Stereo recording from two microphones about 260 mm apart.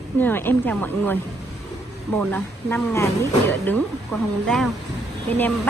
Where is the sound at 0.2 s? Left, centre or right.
Centre.